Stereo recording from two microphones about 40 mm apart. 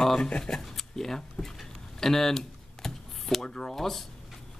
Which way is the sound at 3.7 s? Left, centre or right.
Centre.